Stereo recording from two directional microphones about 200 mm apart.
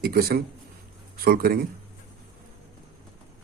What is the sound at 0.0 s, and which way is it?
A man's voice, 50° right (ahead or behind).